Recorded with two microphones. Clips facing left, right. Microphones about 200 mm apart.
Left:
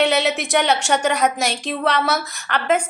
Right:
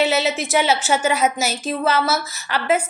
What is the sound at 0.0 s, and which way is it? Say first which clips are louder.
A woman's voice: left 1 dB; centre (ahead or behind).